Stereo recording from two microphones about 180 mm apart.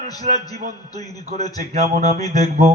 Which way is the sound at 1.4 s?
20° left (ahead or behind).